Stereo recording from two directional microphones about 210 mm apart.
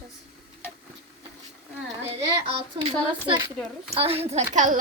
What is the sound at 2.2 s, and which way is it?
Speech, 25° right (ahead or behind).